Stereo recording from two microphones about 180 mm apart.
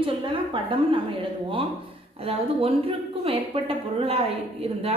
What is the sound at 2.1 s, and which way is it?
A woman's voice, 35° right (ahead or behind).